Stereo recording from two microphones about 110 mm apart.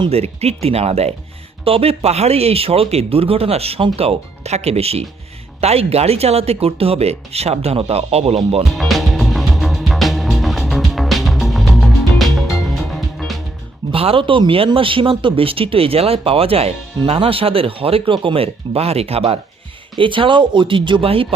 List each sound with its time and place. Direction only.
0.1 s speech: 70° right (ahead or behind)
1.6 s speech: 60° right (ahead or behind)
8.7 s music: centre (ahead or behind)
13.9 s speech: 60° right (ahead or behind)
20.0 s speech: 50° right (ahead or behind)